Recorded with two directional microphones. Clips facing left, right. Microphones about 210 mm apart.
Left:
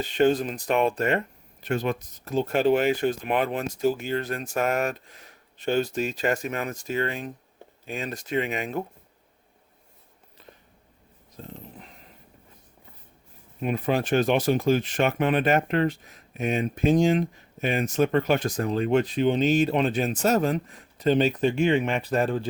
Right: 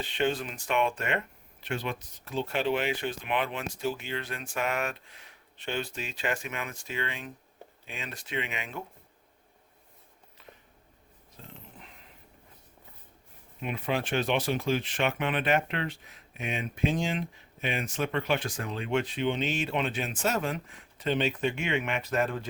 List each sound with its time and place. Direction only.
0.0 s speech: 40° left (ahead or behind)
11.4 s dog: 40° left (ahead or behind)
13.6 s speech: 40° left (ahead or behind)